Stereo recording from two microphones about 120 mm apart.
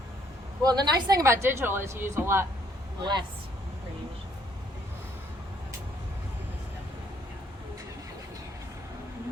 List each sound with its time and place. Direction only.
0.6 s a woman's voice: 35° right (ahead or behind)
1.2 s a woman's voice: 20° right (ahead or behind)
3.0 s a woman's voice: 40° right (ahead or behind)